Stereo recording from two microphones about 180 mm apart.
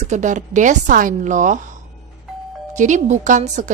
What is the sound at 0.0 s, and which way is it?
A woman's voice, 40° right (ahead or behind).